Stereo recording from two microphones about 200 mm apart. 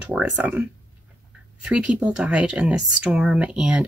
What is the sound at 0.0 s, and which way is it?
Speech, 5° right (ahead or behind).